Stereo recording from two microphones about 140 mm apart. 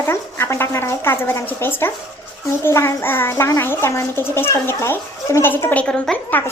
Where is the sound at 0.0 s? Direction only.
20° left (ahead or behind).